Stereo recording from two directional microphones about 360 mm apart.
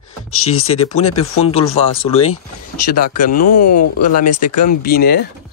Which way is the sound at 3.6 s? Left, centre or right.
Left.